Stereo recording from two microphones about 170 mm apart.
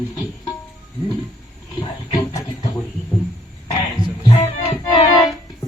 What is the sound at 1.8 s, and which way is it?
Speech, 25° left (ahead or behind).